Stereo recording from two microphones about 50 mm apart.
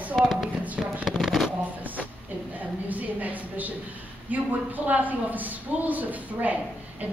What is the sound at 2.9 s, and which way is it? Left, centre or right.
Speech, right.